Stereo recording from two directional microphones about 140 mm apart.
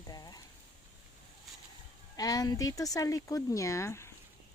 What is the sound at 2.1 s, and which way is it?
Speech, 25° left (ahead or behind).